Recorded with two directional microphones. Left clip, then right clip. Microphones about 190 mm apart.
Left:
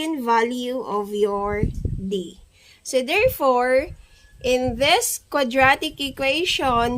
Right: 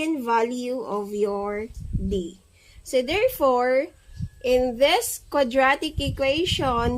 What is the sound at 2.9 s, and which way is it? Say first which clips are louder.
A woman's voice: left 3 dB; 20° left (ahead or behind).